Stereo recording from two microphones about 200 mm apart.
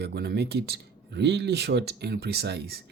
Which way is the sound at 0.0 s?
55° right (ahead or behind).